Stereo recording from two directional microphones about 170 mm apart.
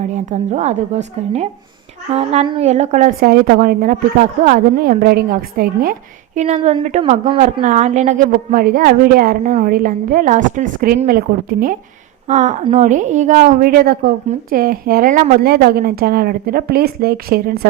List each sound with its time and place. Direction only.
0.0 s a woman's voice: 45° right (ahead or behind)
6.4 s a woman's voice: 40° right (ahead or behind)
7.0 s speech: 30° right (ahead or behind)
7.6 s a woman's voice: 45° right (ahead or behind)
12.3 s a woman's voice: 45° right (ahead or behind); by 17.7 s 65° right (ahead or behind)